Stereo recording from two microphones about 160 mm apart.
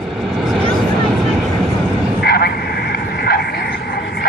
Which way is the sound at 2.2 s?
80° left.